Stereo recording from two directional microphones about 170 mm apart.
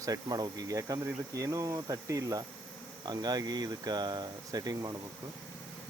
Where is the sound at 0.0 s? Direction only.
20° right (ahead or behind).